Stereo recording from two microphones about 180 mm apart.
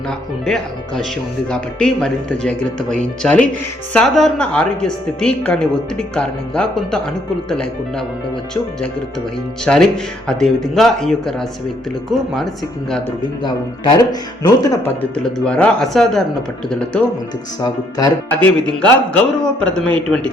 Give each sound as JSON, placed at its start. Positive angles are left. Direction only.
{"t": 0.4, "sound": "a woman's voice", "side_deg": 5}
{"t": 9.6, "sound": "a woman's voice", "side_deg": 5}
{"t": 13.4, "sound": "speech", "side_deg": 25}
{"t": 15.1, "sound": "a woman's voice", "side_deg": 5}
{"t": 17.6, "sound": "speech", "side_deg": 20}
{"t": 18.6, "sound": "a woman's voice", "side_deg": 5}